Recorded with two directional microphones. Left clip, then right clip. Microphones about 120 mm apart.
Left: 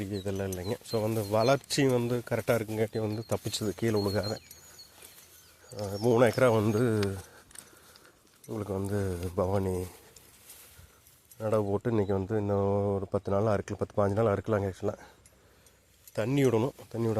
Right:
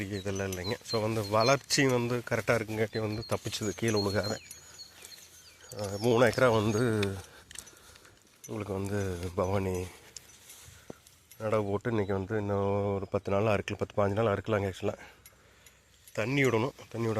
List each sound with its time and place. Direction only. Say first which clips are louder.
0.0 s speech: even; 35° left (ahead or behind)
3.6 s speech: even; 35° left (ahead or behind)
5.7 s speech: left 1 dB; 25° left (ahead or behind)
8.4 s speech: left 1 dB; 30° left (ahead or behind)
11.3 s speech: left 1 dB; 40° left (ahead or behind)
11.8 s speech: left 2 dB; 65° left (ahead or behind)
12.0 s speech: left 2 dB; 55° left (ahead or behind)
14.5 s speech: left 1 dB; 30° left (ahead or behind)
16.1 s speech: left 1 dB; 55° left (ahead or behind)